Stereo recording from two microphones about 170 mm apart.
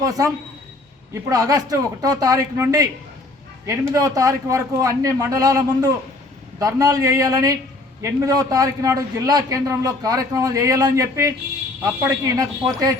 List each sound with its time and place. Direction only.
0.0 s a man's voice: 20° right (ahead or behind)